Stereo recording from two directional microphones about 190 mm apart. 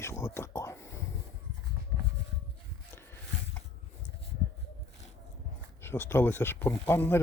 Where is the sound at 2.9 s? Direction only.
10° left (ahead or behind).